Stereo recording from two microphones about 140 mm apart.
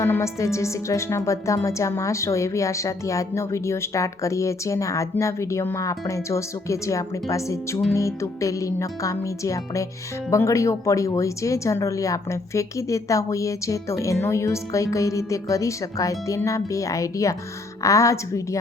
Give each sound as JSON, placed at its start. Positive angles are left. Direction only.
{"t": 0.0, "sound": "a woman's voice", "side_deg": 20}